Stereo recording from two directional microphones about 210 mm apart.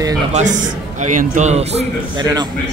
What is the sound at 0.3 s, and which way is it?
A man's voice, 35° right (ahead or behind).